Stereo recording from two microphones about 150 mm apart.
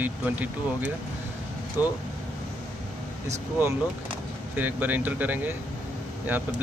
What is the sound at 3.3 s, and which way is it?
Speech, 15° right (ahead or behind).